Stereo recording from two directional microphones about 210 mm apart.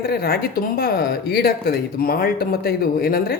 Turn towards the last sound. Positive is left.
turn(degrees=45)  # may be behind; listen again after turning